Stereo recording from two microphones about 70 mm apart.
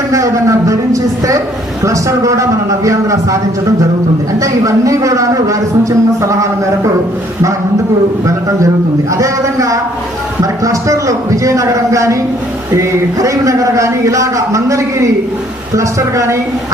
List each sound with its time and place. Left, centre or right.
0.1 s a sound: right
1.8 s a man's voice: right
4.4 s a man's voice: right
9.1 s a man's voice: right